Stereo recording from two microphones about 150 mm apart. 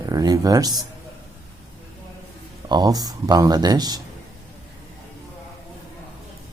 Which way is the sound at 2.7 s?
25° right (ahead or behind).